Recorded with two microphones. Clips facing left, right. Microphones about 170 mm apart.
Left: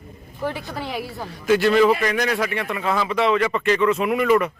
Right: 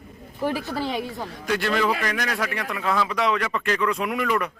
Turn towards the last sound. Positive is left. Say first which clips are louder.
# left 6 dB
turn(degrees=5)  # may be behind; listen again after turning